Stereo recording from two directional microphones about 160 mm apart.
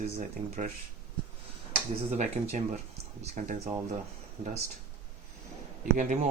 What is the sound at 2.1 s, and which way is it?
Speech, 50° right (ahead or behind).